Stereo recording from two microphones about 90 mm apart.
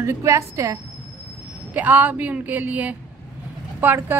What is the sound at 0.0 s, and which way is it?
Speech, 30° right (ahead or behind).